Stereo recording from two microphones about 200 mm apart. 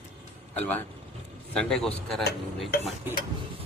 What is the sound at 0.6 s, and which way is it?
A man's voice, 10° left (ahead or behind).